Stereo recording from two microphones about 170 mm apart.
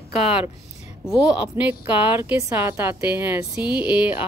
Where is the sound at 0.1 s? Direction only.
35° left (ahead or behind).